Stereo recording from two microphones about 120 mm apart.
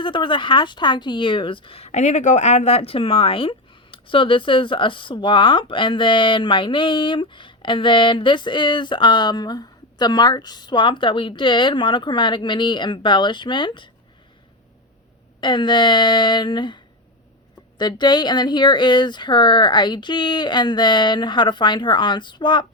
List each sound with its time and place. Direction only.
0.0 s a woman's voice: 45° left (ahead or behind)
15.4 s speech: 40° left (ahead or behind)